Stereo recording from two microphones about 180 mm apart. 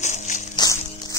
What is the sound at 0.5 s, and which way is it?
Music, 20° left (ahead or behind).